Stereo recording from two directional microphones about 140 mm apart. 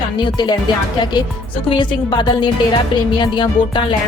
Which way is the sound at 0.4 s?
35° left (ahead or behind).